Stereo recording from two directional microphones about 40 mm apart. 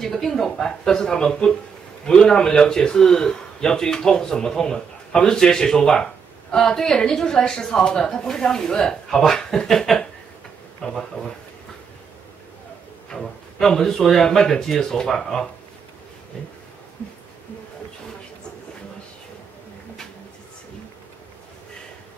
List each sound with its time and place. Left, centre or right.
0.0 s a man's voice: centre
13.1 s a man's voice: centre